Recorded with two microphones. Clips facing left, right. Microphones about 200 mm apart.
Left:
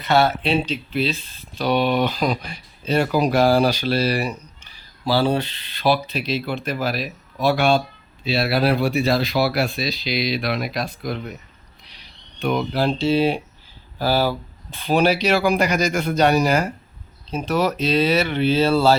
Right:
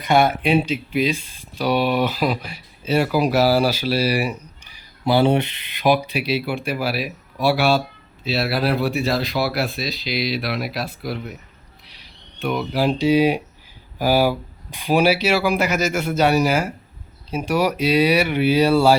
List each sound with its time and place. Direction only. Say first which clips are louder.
0.0 s speech: right 1 dB; 15° right (ahead or behind)
12.4 s speech: even; 5° right (ahead or behind)